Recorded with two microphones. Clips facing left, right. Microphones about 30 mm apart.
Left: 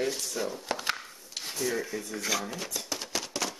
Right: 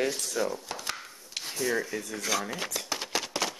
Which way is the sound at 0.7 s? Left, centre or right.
Left.